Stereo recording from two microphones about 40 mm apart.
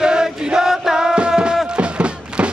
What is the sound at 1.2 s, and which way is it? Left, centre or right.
Music, right.